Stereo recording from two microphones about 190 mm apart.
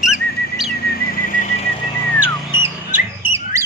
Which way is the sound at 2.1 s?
10° right (ahead or behind).